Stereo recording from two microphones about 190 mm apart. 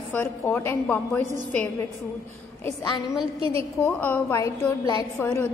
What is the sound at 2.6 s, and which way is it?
A woman's voice, 15° left (ahead or behind).